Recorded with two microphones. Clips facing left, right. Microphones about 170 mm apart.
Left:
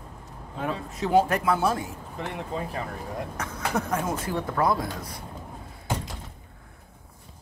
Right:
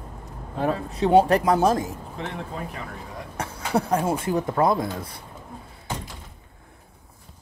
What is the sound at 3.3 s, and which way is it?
Speech, 30° right (ahead or behind).